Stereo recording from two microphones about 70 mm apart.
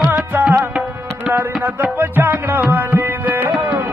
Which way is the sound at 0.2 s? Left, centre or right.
Right.